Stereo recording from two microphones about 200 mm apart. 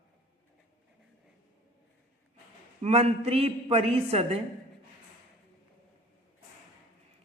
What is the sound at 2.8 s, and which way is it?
A woman's voice, 30° right (ahead or behind).